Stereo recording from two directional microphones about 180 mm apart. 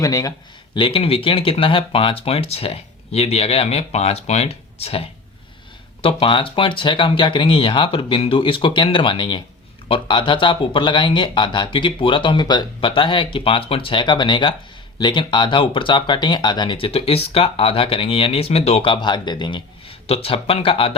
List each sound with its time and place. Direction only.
0.0 s speech: 20° left (ahead or behind)